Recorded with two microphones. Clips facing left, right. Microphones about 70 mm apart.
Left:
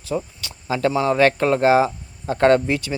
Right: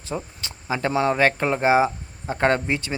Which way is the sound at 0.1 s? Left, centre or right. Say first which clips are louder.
Left 5 dB; right.